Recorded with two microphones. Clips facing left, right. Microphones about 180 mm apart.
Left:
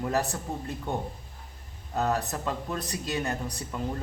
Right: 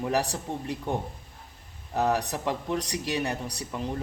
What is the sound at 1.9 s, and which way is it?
Speech, 15° right (ahead or behind).